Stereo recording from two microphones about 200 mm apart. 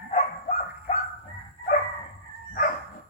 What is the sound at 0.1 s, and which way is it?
Dog, 35° left (ahead or behind).